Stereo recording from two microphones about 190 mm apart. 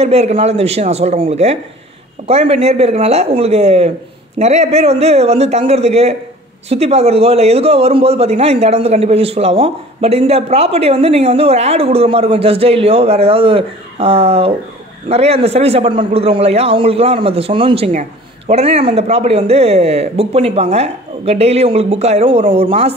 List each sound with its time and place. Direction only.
0.0 s a man's voice: 35° right (ahead or behind)